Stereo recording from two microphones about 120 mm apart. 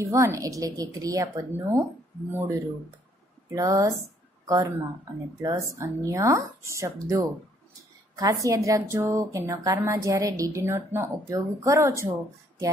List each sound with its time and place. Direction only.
0.0 s a woman's voice: 25° right (ahead or behind)
8.2 s a woman's voice: 25° right (ahead or behind)